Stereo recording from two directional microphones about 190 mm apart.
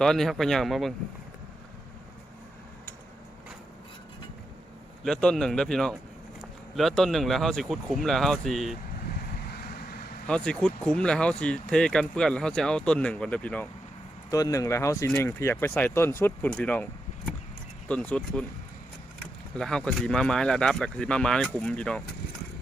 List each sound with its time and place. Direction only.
0.0 s speech: centre (ahead or behind)
5.0 s speech: 5° left (ahead or behind)
9.5 s vehicle: 55° left (ahead or behind)
10.2 s speech: 5° left (ahead or behind)
14.3 s speech: 20° left (ahead or behind)
17.8 s speech: 5° left (ahead or behind)